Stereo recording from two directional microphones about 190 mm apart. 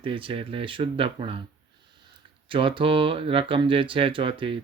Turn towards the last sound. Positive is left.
turn(degrees=-30)  # may be behind; listen again after turning